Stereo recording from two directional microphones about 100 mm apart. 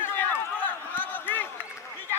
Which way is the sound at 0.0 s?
20° left (ahead or behind).